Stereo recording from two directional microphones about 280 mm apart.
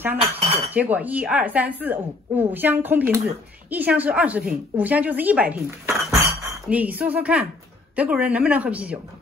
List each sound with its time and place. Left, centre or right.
0.0 s speech: centre